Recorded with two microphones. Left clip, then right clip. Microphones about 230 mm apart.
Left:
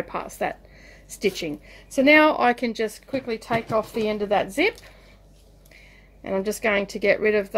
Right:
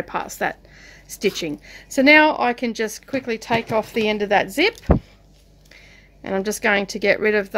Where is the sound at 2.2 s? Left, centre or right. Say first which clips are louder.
Right 1 dB; centre.